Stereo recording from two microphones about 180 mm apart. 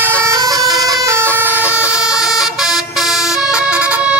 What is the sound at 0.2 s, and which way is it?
Vehicle, 15° right (ahead or behind).